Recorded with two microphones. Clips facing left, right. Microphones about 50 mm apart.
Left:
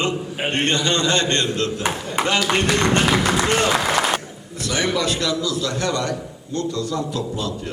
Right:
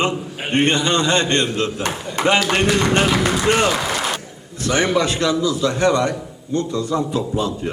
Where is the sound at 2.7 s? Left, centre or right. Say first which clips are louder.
Right 1 dB; centre.